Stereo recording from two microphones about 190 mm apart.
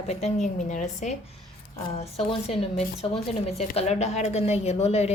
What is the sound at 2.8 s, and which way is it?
A woman's voice, 35° left (ahead or behind).